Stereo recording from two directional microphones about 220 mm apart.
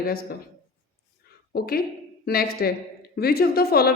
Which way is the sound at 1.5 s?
45° left (ahead or behind).